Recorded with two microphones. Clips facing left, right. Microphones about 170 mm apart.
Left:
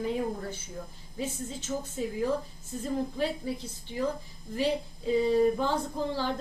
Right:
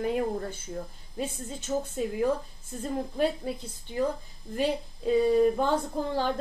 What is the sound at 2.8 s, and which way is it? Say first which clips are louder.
Speech: right 2 dB; 55° right (ahead or behind).